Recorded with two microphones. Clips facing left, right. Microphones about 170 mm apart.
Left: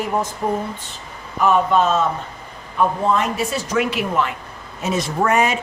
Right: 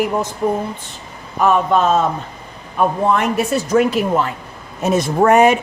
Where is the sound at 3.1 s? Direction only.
60° right (ahead or behind).